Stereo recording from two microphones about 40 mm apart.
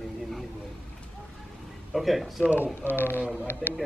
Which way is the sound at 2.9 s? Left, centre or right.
Left.